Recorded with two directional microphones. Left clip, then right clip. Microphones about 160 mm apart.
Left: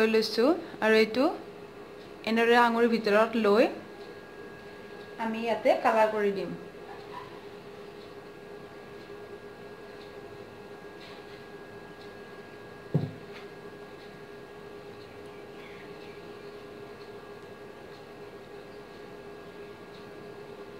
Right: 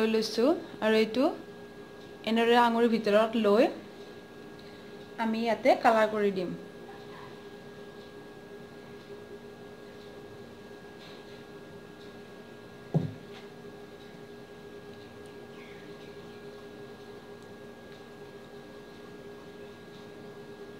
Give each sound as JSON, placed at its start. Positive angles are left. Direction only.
{"t": 0.0, "sound": "a woman's voice", "side_deg": -10}
{"t": 5.1, "sound": "a woman's voice", "side_deg": -35}